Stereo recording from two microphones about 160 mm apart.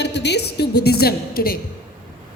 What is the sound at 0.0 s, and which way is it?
A woman's voice, 90° left.